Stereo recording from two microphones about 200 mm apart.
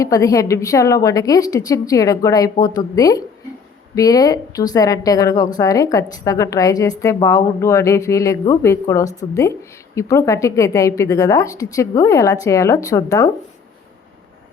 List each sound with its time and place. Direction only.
0.0 s a woman's voice: 15° left (ahead or behind)